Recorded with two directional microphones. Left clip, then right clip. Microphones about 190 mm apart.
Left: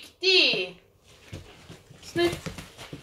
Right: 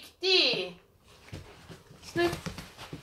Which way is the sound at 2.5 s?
15° left (ahead or behind).